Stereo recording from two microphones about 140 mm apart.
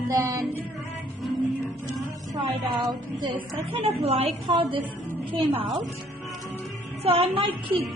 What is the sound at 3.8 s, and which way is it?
A woman's voice, 45° right (ahead or behind).